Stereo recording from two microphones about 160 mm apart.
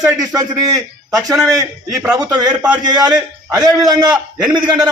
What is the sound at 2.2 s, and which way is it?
Speech, 25° right (ahead or behind).